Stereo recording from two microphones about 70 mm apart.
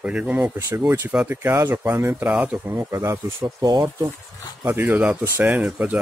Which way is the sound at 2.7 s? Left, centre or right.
Right.